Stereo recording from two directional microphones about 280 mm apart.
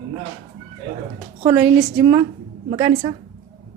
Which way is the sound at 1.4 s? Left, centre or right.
Centre.